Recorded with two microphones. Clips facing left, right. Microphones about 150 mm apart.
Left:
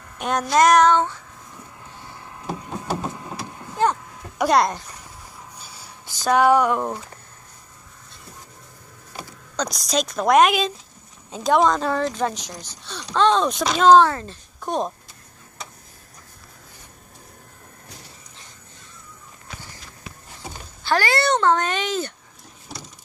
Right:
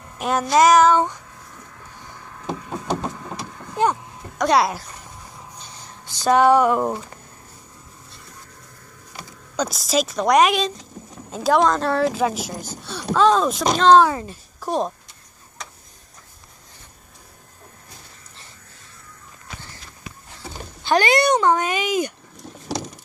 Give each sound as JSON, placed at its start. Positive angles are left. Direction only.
{"t": 0.2, "sound": "speech", "side_deg": -5}
{"t": 2.4, "sound": "knock", "side_deg": 10}
{"t": 3.7, "sound": "vehicle", "side_deg": -10}
{"t": 4.4, "sound": "a child's voice", "side_deg": 0}
{"t": 5.6, "sound": "a sound", "side_deg": 10}
{"t": 6.2, "sound": "speech", "side_deg": 0}
{"t": 9.6, "sound": "speech", "side_deg": -5}
{"t": 12.5, "sound": "speech", "side_deg": -50}
{"t": 13.1, "sound": "speech", "side_deg": -5}
{"t": 14.0, "sound": "a child's voice", "side_deg": -10}
{"t": 20.4, "sound": "a sound", "side_deg": 15}
{"t": 20.8, "sound": "speech", "side_deg": -20}